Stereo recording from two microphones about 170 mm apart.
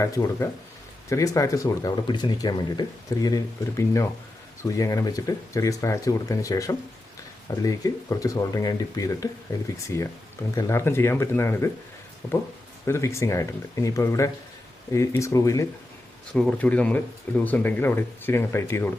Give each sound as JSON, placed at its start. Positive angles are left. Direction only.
{"t": 0.0, "sound": "speech", "side_deg": 20}
{"t": 12.8, "sound": "speech", "side_deg": 15}
{"t": 16.3, "sound": "speech", "side_deg": 5}